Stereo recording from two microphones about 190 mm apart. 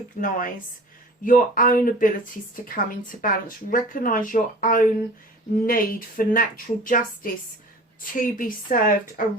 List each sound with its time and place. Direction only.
0.2 s speech: 45° left (ahead or behind)